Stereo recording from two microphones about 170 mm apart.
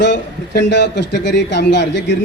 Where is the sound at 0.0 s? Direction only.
90° left.